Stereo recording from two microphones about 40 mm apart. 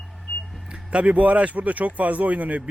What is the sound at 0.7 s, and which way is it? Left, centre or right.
Speech, right.